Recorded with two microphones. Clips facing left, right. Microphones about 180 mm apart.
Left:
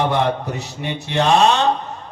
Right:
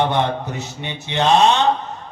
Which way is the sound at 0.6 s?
20° right (ahead or behind).